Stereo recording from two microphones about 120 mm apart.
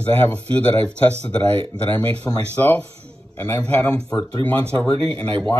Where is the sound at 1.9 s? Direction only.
15° left (ahead or behind).